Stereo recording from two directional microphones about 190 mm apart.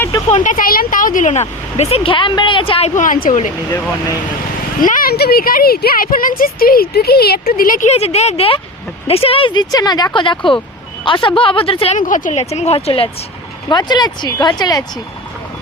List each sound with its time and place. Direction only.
0.3 s speech: 40° left (ahead or behind)
4.8 s speech: 45° left (ahead or behind); by 11.9 s 30° left (ahead or behind)
11.9 s speech: 40° left (ahead or behind); by 14.8 s 20° left (ahead or behind)